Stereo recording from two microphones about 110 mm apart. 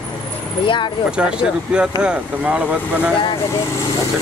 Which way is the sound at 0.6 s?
50° left (ahead or behind).